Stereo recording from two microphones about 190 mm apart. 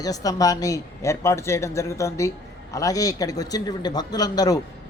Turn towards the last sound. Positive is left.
turn(degrees=20)  # may be behind; listen again after turning